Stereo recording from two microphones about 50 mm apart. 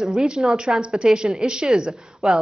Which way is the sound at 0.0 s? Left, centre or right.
Centre.